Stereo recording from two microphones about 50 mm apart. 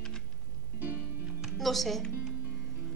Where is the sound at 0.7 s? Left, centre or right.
Right.